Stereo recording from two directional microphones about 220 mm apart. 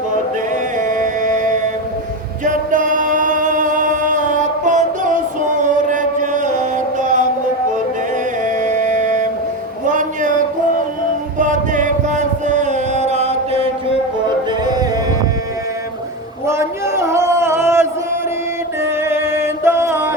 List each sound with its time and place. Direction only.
0.8 s music: 35° right (ahead or behind)
2.4 s male singing: 35° right (ahead or behind)
5.6 s mantra: 35° right (ahead or behind)
8.4 s music: 35° right (ahead or behind)
9.8 s a sound: 35° right (ahead or behind)
11.3 s chant: 35° right (ahead or behind)
14.6 s music: 15° right (ahead or behind)
16.5 s a sound: 10° right (ahead or behind)
18.8 s music: 10° right (ahead or behind)